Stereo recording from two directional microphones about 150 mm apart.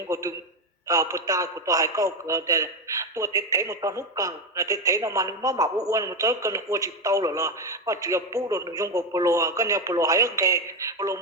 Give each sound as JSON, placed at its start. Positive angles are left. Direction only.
{"t": 0.1, "sound": "a man's voice", "side_deg": -20}